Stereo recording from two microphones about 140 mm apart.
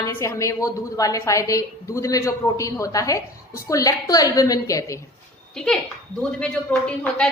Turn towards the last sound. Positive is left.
turn(degrees=5)  # may be behind; listen again after turning